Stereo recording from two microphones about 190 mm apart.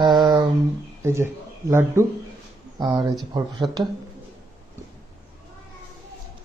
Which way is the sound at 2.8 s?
25° right (ahead or behind).